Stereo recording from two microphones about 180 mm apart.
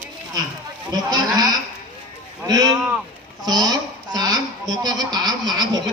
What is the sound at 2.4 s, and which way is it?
Speech, 20° right (ahead or behind).